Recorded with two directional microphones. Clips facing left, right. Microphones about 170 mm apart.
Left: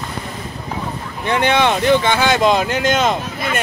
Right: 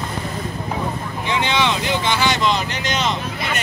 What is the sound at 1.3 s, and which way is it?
Speech, 55° left (ahead or behind).